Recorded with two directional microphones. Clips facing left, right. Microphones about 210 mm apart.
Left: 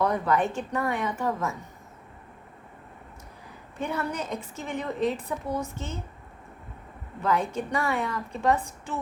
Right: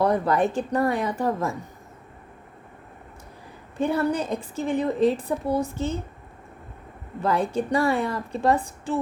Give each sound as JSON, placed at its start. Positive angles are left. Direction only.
{"t": 0.0, "sound": "a woman's voice", "side_deg": -35}
{"t": 3.8, "sound": "a woman's voice", "side_deg": -30}
{"t": 7.2, "sound": "a woman's voice", "side_deg": -35}